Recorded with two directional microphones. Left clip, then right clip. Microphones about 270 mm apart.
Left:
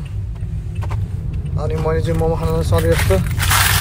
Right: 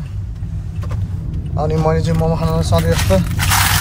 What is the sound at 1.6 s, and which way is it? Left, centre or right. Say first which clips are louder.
Speech: right 4 dB; centre.